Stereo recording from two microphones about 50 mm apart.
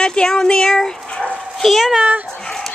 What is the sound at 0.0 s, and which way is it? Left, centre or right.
Dog, centre.